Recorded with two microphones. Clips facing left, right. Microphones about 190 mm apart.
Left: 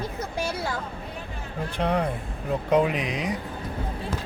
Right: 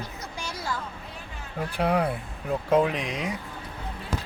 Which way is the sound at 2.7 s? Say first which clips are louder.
Left 1 dB; 5° left (ahead or behind).